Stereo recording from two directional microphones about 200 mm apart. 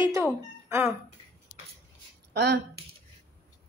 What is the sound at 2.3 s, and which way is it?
Speech, 55° right (ahead or behind).